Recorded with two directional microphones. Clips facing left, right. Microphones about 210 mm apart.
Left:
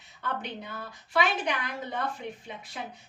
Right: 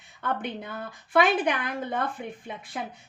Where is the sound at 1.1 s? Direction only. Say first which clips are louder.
Right 5 dB; 55° right (ahead or behind).